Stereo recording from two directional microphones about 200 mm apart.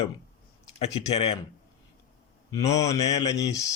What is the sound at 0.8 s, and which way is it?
Speech, 30° left (ahead or behind).